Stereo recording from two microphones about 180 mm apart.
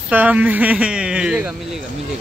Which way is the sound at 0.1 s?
10° right (ahead or behind).